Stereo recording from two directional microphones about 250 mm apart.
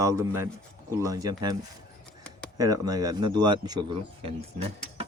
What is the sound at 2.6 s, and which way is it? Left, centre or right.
A man's voice, centre.